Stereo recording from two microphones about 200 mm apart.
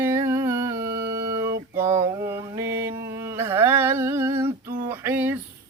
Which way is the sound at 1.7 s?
15° right (ahead or behind).